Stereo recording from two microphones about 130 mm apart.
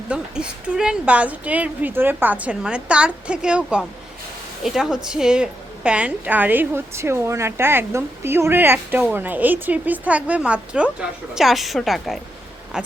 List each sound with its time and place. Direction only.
0.1 s a woman's voice: 10° right (ahead or behind)